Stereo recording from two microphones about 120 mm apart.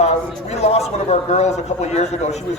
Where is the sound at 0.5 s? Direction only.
65° left (ahead or behind).